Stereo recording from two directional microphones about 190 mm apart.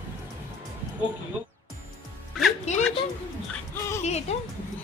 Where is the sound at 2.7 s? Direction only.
35° left (ahead or behind).